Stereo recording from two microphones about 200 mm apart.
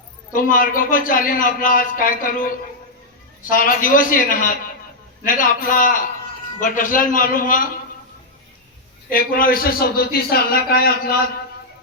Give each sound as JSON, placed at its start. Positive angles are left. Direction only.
{"t": 0.3, "sound": "a man's voice", "side_deg": 45}
{"t": 3.5, "sound": "a man's voice", "side_deg": 45}
{"t": 9.0, "sound": "a man's voice", "side_deg": 45}